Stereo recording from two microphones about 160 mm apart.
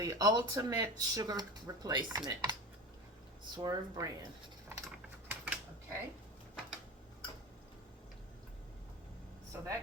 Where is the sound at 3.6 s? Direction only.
20° right (ahead or behind).